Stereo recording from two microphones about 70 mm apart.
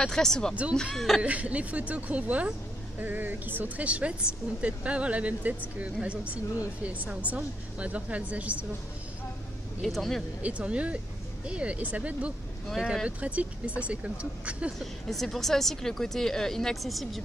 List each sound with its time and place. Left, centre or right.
0.0 s speech: centre
1.2 s speech: centre
9.8 s speech: centre
10.4 s speech: centre
14.8 s speech: centre